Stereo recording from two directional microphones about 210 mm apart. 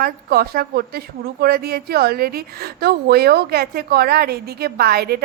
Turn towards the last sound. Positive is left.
turn(degrees=-50)  # may be behind; listen again after turning